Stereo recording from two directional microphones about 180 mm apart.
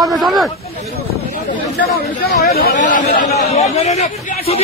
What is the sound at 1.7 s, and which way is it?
Speech, 60° left (ahead or behind).